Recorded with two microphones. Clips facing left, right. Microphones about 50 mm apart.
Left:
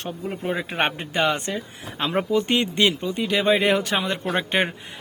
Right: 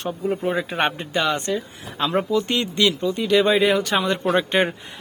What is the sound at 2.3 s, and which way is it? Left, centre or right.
Speech, left.